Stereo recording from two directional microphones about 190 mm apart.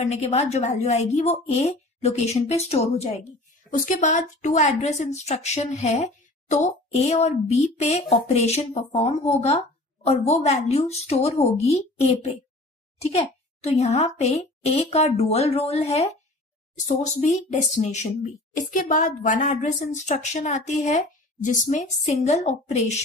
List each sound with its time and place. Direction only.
0.0 s speech: 35° left (ahead or behind)
13.7 s speech: 35° left (ahead or behind)